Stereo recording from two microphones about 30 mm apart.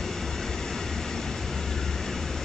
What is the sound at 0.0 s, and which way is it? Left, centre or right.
Vehicle, centre.